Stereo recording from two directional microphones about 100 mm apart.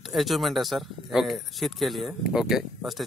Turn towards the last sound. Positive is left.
turn(degrees=-5)  # may be behind; listen again after turning